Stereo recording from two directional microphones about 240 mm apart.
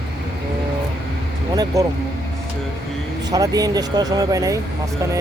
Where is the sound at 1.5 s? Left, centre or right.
Centre.